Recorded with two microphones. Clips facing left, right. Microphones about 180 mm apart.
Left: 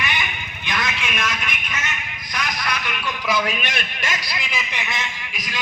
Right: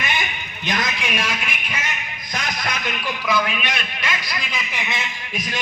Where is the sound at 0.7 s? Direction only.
40° right (ahead or behind).